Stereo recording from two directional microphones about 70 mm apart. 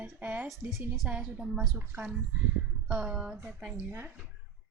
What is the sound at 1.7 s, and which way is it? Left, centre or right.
Speech, right.